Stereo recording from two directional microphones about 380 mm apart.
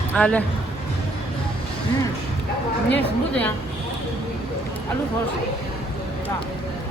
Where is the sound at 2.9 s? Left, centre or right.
Centre.